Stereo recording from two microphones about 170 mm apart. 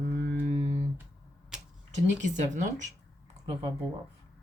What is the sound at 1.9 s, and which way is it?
Speech, 45° right (ahead or behind).